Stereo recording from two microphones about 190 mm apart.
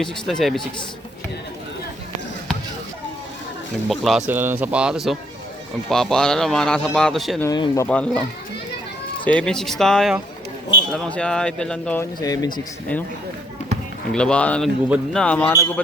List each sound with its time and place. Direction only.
0.0 s a man's voice: centre (ahead or behind)
3.8 s a man's voice: centre (ahead or behind)
7.4 s speech: 20° left (ahead or behind)
7.9 s a man's voice: 5° left (ahead or behind)
9.2 s a man's voice: 5° left (ahead or behind)
12.2 s speech: 20° left (ahead or behind)
14.1 s a man's voice: 5° left (ahead or behind)
14.8 s a man's voice: 5° right (ahead or behind)
15.2 s speech: 5° left (ahead or behind)